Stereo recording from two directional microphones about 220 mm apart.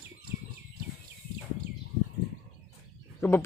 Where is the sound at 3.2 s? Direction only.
10° left (ahead or behind).